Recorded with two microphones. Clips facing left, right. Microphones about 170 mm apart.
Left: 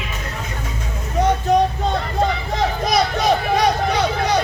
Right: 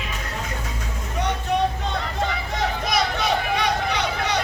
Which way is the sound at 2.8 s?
40° left (ahead or behind).